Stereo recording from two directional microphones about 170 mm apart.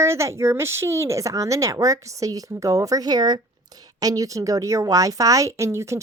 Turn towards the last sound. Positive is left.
turn(degrees=-15)  # may be behind; listen again after turning